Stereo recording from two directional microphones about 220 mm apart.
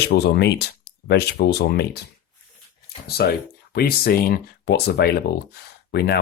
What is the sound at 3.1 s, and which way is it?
Speech, 45° left (ahead or behind).